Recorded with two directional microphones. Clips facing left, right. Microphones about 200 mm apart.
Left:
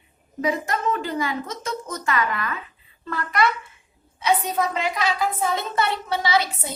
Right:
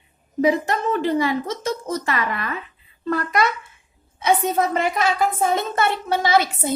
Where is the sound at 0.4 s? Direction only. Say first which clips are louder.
Right 4 dB; 30° right (ahead or behind).